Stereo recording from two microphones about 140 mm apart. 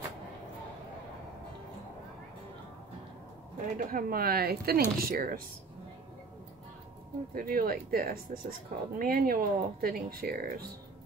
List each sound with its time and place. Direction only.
3.7 s speech: 85° right
7.3 s speech: 90° right